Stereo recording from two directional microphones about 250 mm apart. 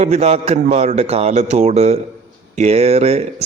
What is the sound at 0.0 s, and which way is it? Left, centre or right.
A man's voice, right.